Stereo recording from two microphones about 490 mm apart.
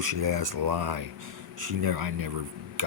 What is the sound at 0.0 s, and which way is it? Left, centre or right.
Speech, right.